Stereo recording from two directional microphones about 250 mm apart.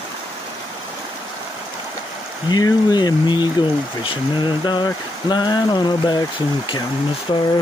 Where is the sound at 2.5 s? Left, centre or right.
Centre.